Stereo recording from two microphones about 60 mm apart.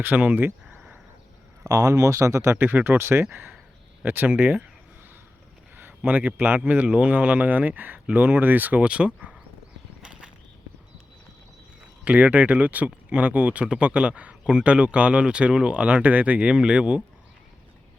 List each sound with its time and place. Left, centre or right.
0.0 s speech: right
1.6 s speech: right
2.6 s speech: right
4.0 s speech: right
6.1 s speech: right
8.8 s speech: centre
10.0 s a sound: centre
12.0 s speech: right